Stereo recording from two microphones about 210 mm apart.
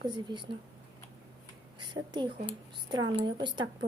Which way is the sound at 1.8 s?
20° right (ahead or behind).